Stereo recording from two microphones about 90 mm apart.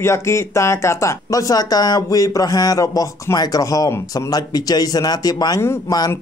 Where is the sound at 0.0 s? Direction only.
30° left (ahead or behind).